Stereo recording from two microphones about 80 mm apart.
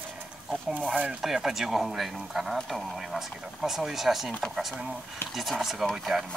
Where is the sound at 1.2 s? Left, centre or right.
Centre.